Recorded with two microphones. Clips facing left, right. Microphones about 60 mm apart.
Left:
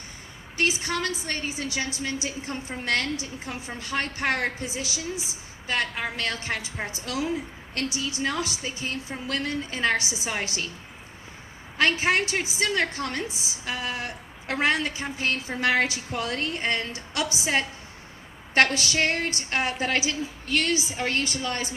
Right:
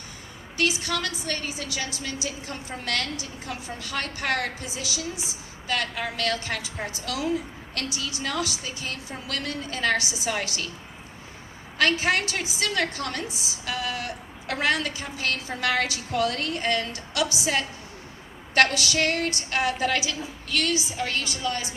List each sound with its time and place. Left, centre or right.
0.5 s a woman's voice: left
11.8 s a woman's voice: left